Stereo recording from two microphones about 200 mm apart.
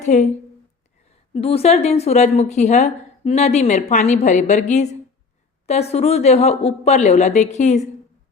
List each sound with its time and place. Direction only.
0.0 s a woman's voice: 35° left (ahead or behind)
1.3 s a woman's voice: 30° left (ahead or behind)